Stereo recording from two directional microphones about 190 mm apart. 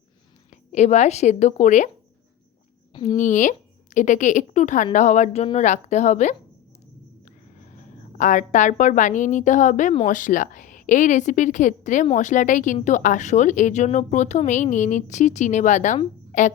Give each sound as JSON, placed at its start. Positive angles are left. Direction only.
{"t": 0.7, "sound": "a woman's voice", "side_deg": 40}
{"t": 2.9, "sound": "a sound", "side_deg": 25}
{"t": 3.2, "sound": "a woman's voice", "side_deg": 40}
{"t": 8.2, "sound": "a woman's voice", "side_deg": 40}